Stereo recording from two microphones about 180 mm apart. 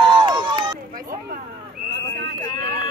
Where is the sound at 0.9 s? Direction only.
55° right (ahead or behind).